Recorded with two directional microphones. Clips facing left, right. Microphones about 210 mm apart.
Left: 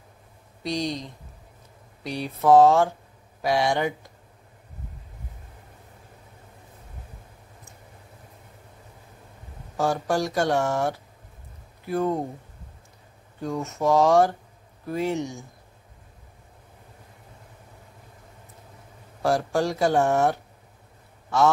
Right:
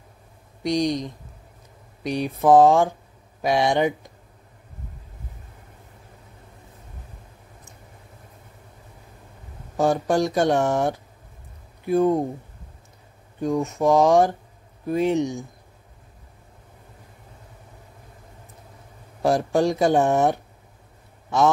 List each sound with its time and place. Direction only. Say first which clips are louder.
0.7 s speech: right 6 dB; 15° right (ahead or behind)
9.8 s speech: right 4 dB; 20° right (ahead or behind)
13.4 s speech: right 5 dB; 15° right (ahead or behind)
19.2 s speech: right 3 dB; 20° right (ahead or behind)